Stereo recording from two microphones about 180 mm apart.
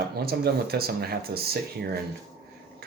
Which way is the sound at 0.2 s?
60° right (ahead or behind).